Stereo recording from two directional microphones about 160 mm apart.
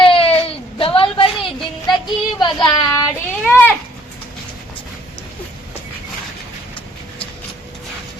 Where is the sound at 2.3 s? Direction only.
25° left (ahead or behind).